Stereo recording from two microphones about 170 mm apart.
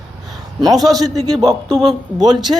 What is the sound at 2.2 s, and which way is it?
Speech, 25° right (ahead or behind).